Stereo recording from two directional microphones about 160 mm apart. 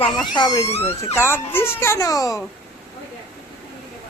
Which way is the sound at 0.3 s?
25° left (ahead or behind).